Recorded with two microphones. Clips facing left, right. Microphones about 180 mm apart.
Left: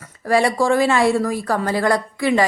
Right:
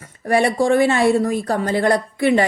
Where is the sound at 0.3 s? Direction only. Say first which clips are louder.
Right 1 dB; 25° right (ahead or behind).